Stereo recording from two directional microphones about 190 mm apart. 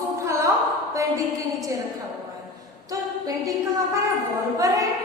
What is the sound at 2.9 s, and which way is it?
A capella, 20° right (ahead or behind).